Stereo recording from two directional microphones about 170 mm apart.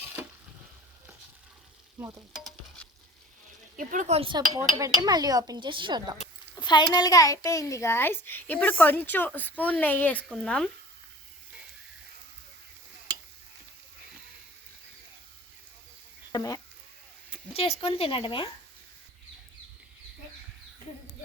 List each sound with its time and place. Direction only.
3.8 s speech: 45° right (ahead or behind); by 6.1 s 25° right (ahead or behind)
6.6 s a child's voice: 25° left (ahead or behind); by 10.7 s 5° left (ahead or behind)
16.3 s speech: 20° left (ahead or behind)
17.5 s speech: 35° left (ahead or behind)